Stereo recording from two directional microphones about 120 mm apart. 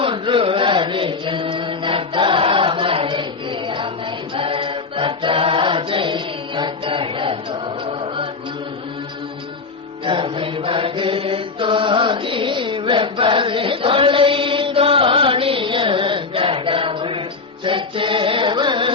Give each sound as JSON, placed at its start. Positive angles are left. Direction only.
{"t": 0.0, "sound": "chant", "side_deg": -45}
{"t": 7.9, "sound": "music", "side_deg": -50}
{"t": 10.1, "sound": "mantra", "side_deg": -45}